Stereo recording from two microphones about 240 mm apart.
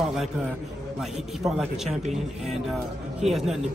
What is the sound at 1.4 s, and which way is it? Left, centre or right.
Speech, centre.